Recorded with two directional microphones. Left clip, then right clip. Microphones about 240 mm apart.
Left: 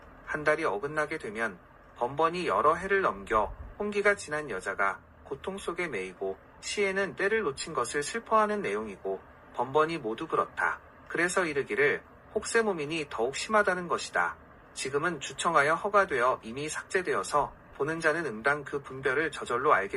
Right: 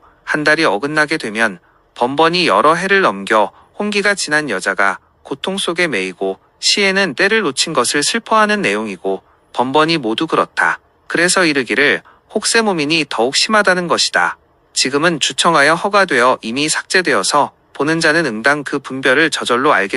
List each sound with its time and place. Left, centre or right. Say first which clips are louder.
0.3 s speech: right 15 dB; right